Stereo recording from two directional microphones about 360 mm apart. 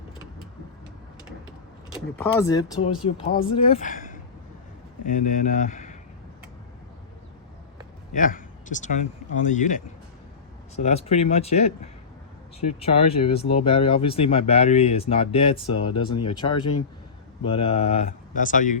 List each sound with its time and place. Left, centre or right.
2.1 s speech: centre
5.2 s speech: left
8.1 s speech: left